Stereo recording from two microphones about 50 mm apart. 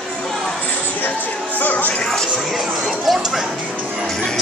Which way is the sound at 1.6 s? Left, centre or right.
Left.